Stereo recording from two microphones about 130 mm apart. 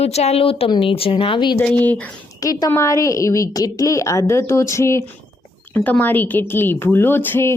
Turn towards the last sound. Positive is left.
turn(degrees=15)  # may be behind; listen again after turning